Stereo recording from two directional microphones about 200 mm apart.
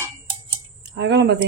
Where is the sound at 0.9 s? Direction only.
60° right (ahead or behind).